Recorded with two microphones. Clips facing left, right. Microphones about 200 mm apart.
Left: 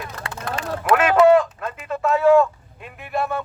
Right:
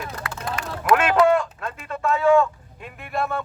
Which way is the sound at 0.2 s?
30° left (ahead or behind).